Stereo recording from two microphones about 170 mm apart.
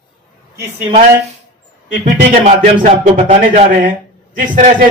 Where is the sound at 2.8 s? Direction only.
40° right (ahead or behind).